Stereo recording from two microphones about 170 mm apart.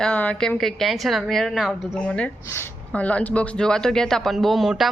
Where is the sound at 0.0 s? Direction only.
5° left (ahead or behind).